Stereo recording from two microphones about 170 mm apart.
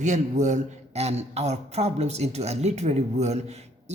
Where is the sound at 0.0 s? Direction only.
45° right (ahead or behind).